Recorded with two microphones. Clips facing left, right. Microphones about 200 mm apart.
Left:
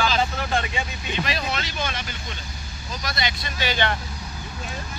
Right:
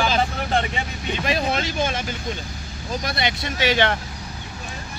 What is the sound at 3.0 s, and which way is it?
Speech, 60° right (ahead or behind).